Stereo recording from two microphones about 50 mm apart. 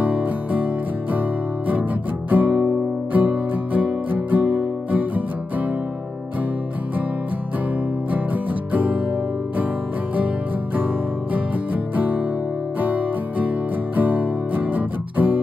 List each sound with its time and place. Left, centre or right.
0.0 s music: right
2.3 s music: right
11.3 s music: right